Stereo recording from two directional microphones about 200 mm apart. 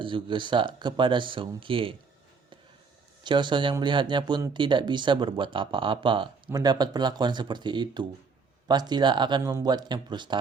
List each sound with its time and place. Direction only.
0.0 s speech: 25° right (ahead or behind)
3.2 s speech: 25° right (ahead or behind)